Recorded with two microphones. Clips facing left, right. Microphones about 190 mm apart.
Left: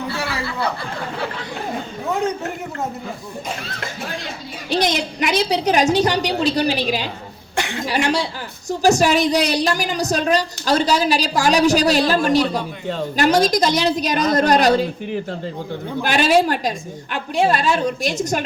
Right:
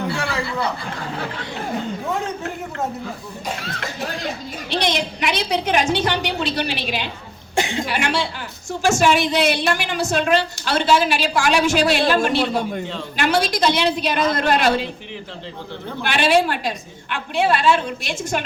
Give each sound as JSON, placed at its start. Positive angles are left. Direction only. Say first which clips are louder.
{"t": 4.7, "sound": "a woman's voice", "louder": "left 2 dB", "side_deg": 45}
{"t": 7.5, "sound": "a sound", "louder": "right 3 dB", "side_deg": -20}
{"t": 7.9, "sound": "a woman's voice", "louder": "left 3 dB", "side_deg": 40}